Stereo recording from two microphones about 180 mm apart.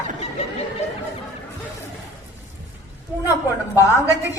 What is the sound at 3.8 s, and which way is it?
Speech, 20° left (ahead or behind).